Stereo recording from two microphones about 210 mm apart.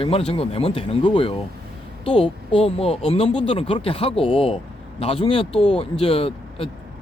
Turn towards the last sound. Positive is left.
turn(degrees=25)  # may be behind; listen again after turning